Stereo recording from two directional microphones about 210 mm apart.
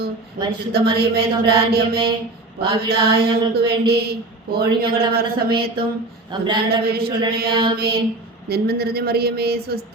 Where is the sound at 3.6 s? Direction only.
50° right (ahead or behind).